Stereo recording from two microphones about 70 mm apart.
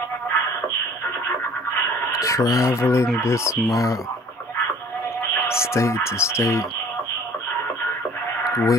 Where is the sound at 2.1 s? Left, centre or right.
Left.